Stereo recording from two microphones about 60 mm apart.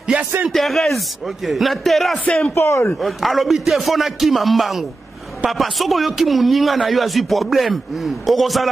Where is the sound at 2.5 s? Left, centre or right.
Left.